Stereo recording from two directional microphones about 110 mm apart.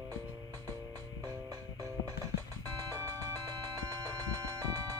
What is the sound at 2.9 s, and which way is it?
Music, 30° right (ahead or behind).